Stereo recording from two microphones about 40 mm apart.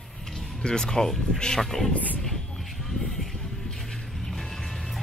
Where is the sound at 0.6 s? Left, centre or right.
Centre.